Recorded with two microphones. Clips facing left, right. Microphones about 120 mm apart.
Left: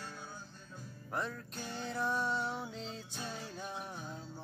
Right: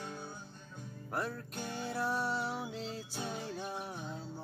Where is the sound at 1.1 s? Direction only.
5° right (ahead or behind).